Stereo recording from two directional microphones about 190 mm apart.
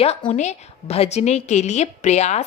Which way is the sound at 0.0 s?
30° left (ahead or behind).